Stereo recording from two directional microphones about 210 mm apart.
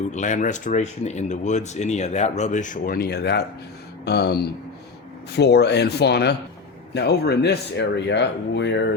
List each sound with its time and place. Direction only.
0.1 s speech: 35° left (ahead or behind); by 8.9 s 55° left (ahead or behind)